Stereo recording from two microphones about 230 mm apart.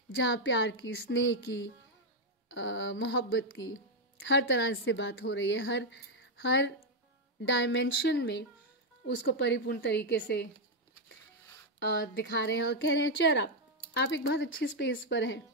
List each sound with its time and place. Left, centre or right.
0.1 s a woman's voice: left
11.8 s a woman's voice: left